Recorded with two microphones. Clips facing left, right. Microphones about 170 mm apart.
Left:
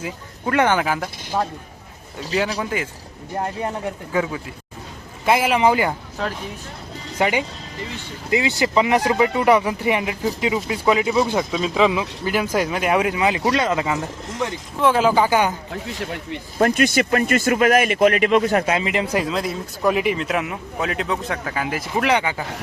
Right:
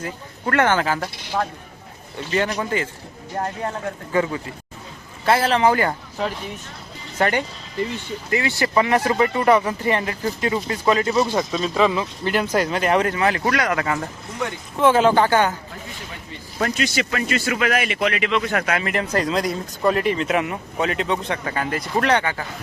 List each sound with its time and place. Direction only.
0.0 s speech: 15° left (ahead or behind)
2.3 s speech: 10° left (ahead or behind)
4.1 s speech: 5° left (ahead or behind)
7.2 s speech: 10° left (ahead or behind)
14.8 s speech: centre (ahead or behind)
16.6 s speech: 50° left (ahead or behind)
18.6 s speech: 20° left (ahead or behind)